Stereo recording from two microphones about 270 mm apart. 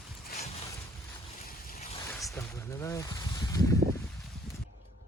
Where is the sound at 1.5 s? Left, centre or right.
Left.